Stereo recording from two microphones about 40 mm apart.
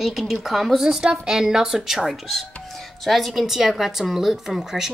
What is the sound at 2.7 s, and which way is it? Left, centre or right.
A woman's voice, centre.